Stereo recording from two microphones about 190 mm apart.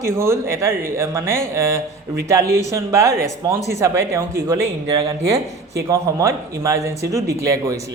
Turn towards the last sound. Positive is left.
turn(degrees=-15)  # may be behind; listen again after turning